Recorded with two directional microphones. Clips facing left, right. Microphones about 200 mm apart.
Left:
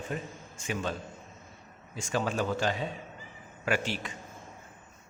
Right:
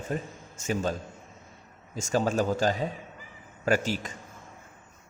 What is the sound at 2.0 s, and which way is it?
A man's voice, 40° right (ahead or behind).